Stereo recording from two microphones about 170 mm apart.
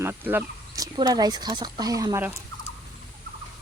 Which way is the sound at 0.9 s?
25° right (ahead or behind).